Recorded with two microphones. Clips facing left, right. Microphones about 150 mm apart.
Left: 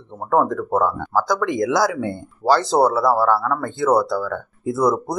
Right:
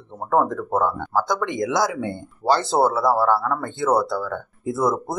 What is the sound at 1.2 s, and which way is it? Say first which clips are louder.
Speech: left 3 dB; 25° right (ahead or behind).